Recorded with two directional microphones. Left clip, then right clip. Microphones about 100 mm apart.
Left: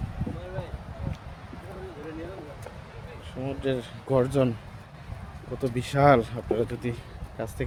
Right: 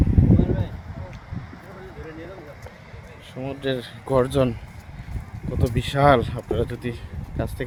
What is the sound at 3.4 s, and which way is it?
Speech, 20° right (ahead or behind).